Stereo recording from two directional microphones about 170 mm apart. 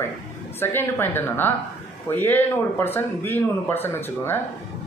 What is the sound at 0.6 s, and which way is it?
Speech, 15° left (ahead or behind).